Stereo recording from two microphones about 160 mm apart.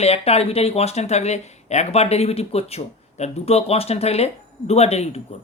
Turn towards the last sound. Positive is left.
turn(degrees=40)  # may be behind; listen again after turning